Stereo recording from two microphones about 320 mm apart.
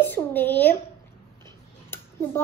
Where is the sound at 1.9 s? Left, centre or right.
Centre.